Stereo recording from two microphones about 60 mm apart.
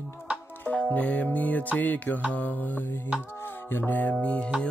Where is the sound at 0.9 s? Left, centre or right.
Left.